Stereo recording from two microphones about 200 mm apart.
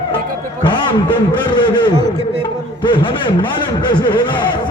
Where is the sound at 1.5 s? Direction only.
25° left (ahead or behind).